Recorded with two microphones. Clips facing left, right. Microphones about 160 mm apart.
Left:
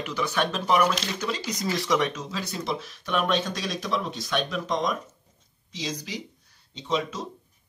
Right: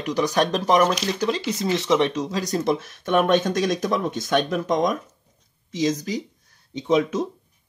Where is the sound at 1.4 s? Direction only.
25° right (ahead or behind); by 7.2 s 55° right (ahead or behind).